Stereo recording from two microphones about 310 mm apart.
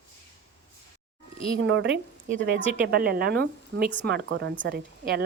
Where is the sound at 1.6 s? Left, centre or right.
Right.